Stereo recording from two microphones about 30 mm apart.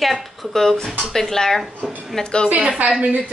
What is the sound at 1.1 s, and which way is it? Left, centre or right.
Speech, centre.